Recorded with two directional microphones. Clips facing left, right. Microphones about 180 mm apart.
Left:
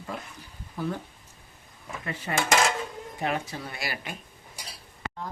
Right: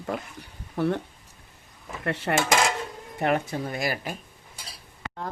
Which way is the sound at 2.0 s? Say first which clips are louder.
Right 7 dB; 75° right (ahead or behind).